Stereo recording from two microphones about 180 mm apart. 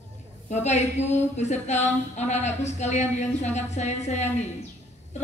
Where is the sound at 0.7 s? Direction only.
40° left (ahead or behind).